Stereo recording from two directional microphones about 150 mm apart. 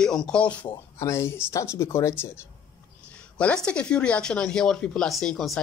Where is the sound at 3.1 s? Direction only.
5° left (ahead or behind).